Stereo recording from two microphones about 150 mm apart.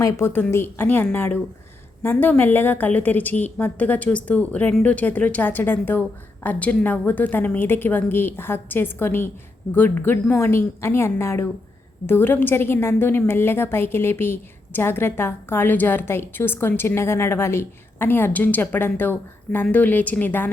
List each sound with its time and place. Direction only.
0.0 s a woman's voice: 15° left (ahead or behind)